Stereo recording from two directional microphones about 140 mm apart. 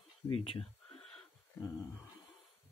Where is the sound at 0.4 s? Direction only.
40° left (ahead or behind).